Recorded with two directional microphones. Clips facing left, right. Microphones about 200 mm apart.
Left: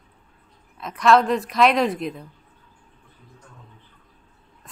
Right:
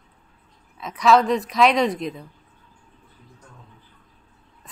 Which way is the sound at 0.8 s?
Centre (ahead or behind).